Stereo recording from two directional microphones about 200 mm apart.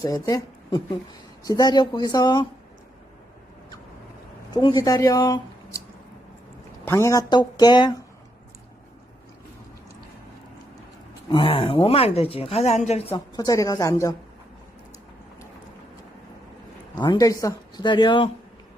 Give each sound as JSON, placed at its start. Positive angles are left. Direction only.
{"t": 0.0, "sound": "a woman's voice", "side_deg": 20}
{"t": 4.5, "sound": "speech", "side_deg": 20}
{"t": 6.8, "sound": "a woman's voice", "side_deg": 15}
{"t": 11.3, "sound": "a woman's voice", "side_deg": 25}
{"t": 17.0, "sound": "a woman's voice", "side_deg": 20}